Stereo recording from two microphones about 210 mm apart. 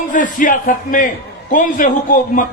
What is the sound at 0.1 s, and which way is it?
A man's voice, 40° left (ahead or behind).